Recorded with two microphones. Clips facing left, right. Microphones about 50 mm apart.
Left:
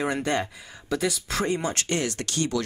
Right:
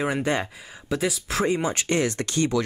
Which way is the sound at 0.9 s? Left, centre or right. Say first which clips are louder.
Right 1 dB; centre.